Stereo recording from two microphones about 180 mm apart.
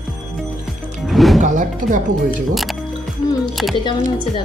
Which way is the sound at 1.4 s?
45° right (ahead or behind).